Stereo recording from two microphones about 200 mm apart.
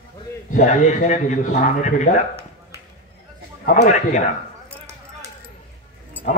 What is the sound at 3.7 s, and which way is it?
Speech, 40° left (ahead or behind).